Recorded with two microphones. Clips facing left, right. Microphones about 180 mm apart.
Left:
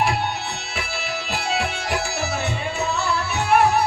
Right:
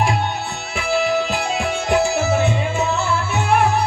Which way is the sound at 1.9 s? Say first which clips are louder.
Right 12 dB; 50° right (ahead or behind).